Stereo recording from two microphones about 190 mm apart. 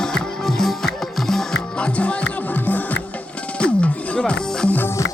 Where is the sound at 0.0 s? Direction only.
Centre (ahead or behind).